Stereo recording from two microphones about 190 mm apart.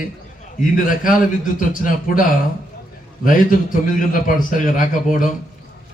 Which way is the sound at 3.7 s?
45° left (ahead or behind).